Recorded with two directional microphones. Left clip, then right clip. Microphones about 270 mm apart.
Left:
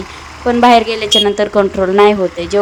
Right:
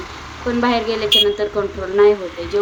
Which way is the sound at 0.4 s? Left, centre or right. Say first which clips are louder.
Left 10 dB; left.